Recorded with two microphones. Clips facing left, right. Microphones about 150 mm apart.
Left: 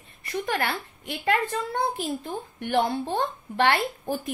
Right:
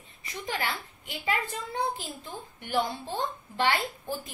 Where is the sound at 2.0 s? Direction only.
60° left (ahead or behind).